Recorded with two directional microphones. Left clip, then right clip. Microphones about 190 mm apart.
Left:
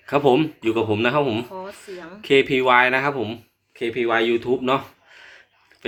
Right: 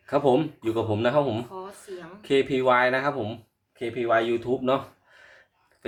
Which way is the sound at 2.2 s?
5° left (ahead or behind).